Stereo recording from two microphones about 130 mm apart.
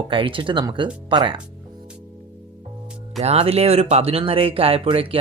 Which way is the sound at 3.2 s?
50° right (ahead or behind).